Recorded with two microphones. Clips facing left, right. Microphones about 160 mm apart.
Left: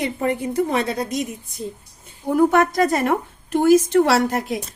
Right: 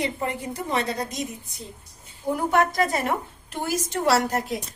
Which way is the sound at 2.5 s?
45° left (ahead or behind).